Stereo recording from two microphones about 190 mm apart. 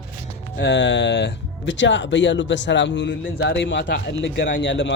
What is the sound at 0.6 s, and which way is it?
A man's voice, 70° left (ahead or behind).